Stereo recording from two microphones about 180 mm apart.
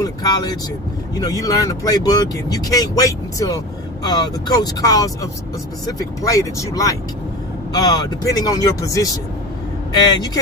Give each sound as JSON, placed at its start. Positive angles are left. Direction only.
{"t": 0.0, "sound": "speech", "side_deg": 20}
{"t": 8.2, "sound": "speech", "side_deg": 20}